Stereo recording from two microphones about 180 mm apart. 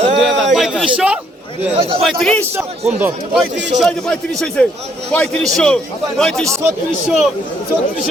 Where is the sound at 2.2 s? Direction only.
5° left (ahead or behind).